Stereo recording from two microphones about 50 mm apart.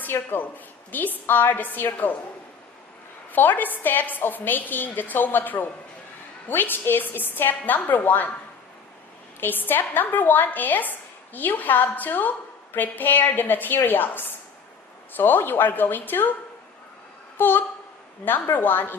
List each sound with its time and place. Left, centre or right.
0.0 s a woman's voice: left
3.3 s a woman's voice: left
9.4 s a woman's voice: left
17.3 s a sound: left
18.5 s a woman's voice: left